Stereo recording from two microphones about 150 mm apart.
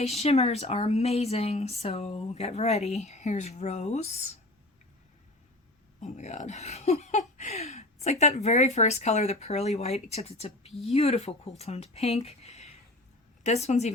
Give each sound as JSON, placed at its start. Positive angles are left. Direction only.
{"t": 0.0, "sound": "speech", "side_deg": 45}
{"t": 6.0, "sound": "speech", "side_deg": 50}